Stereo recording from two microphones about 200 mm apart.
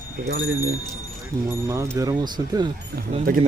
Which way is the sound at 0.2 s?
45° right (ahead or behind).